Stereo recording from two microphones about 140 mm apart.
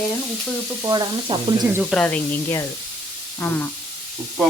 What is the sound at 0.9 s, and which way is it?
Frying, 30° right (ahead or behind).